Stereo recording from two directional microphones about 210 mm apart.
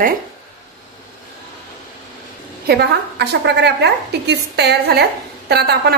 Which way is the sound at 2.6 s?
50° right (ahead or behind).